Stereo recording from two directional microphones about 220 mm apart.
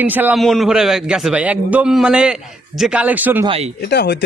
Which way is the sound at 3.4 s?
25° right (ahead or behind).